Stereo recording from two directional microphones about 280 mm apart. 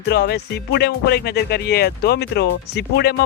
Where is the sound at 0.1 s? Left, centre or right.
Left.